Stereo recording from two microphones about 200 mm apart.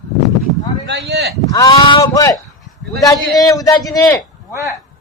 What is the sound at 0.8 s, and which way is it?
Speech, 55° right (ahead or behind).